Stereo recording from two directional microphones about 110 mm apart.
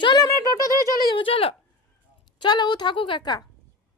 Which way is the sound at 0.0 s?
40° left (ahead or behind).